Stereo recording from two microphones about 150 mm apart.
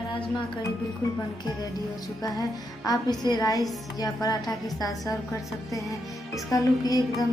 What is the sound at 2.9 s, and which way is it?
A woman's voice, 25° left (ahead or behind).